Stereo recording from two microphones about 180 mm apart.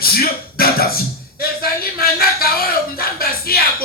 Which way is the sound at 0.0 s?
55° left (ahead or behind).